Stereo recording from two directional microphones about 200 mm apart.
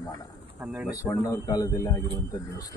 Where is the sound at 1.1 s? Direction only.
15° left (ahead or behind).